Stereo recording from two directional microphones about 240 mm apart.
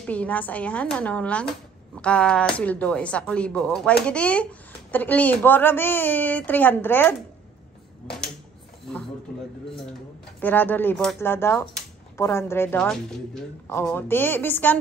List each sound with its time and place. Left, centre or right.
0.0 s speech: centre
10.4 s speech: centre